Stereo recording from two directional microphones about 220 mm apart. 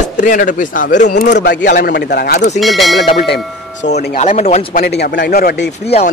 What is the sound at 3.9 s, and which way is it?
Speech, 45° left (ahead or behind).